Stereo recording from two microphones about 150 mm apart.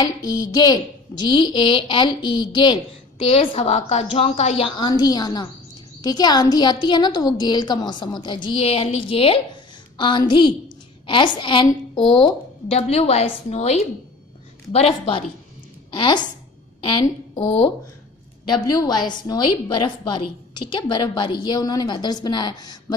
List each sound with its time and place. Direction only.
0.0 s a woman's voice: 25° left (ahead or behind)
3.3 s a woman's voice: 45° left (ahead or behind)
12.7 s a woman's voice: 45° left (ahead or behind); by 22.9 s 25° left (ahead or behind)